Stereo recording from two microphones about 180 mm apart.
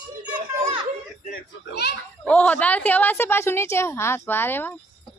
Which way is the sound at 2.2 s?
10° left (ahead or behind).